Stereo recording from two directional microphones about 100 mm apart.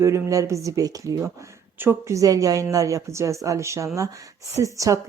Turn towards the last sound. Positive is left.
turn(degrees=-35)  # may be behind; listen again after turning